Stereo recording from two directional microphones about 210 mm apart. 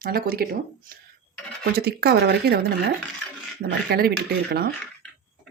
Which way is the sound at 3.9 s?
45° right (ahead or behind).